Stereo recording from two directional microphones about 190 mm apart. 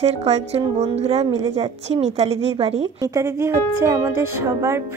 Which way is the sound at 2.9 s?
15° right (ahead or behind).